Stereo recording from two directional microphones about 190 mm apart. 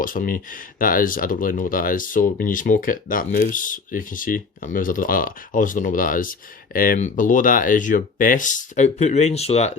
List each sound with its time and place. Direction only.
0.0 s speech: 45° left (ahead or behind)